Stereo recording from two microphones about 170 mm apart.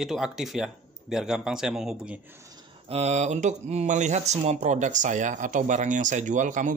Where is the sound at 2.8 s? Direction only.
40° right (ahead or behind).